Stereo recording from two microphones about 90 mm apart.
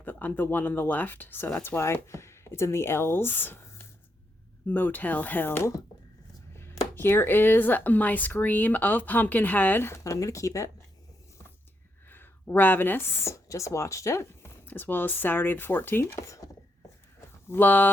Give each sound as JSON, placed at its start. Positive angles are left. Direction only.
{"t": 0.0, "sound": "speech", "side_deg": 20}
{"t": 12.0, "sound": "speech", "side_deg": 25}
{"t": 17.5, "sound": "speech", "side_deg": 20}